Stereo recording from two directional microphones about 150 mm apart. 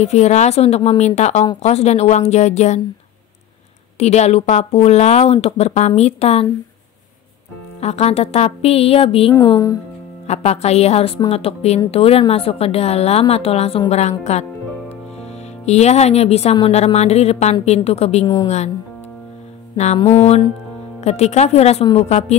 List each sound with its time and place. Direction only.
0.0 s speech: 50° left (ahead or behind)
4.0 s speech: 45° left (ahead or behind)
7.8 s a woman's voice: 45° left (ahead or behind)
15.6 s speech: 45° left (ahead or behind)
18.2 s a woman's voice: 30° left (ahead or behind)
20.1 s speech: 45° left (ahead or behind)